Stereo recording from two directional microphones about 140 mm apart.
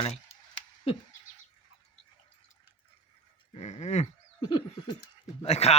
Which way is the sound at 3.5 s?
55° left (ahead or behind).